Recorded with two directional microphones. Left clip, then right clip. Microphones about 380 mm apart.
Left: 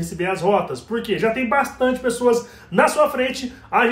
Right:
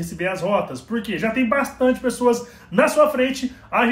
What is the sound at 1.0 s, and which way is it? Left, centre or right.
A man's voice, centre.